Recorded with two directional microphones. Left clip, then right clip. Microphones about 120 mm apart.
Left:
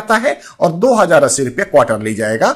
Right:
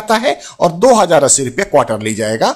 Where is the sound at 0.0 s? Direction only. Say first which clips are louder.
Even; 20° right (ahead or behind).